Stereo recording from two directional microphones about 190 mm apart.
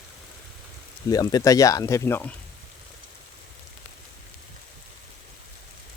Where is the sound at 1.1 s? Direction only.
20° left (ahead or behind).